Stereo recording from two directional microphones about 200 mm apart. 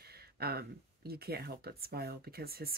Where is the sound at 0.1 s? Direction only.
50° right (ahead or behind).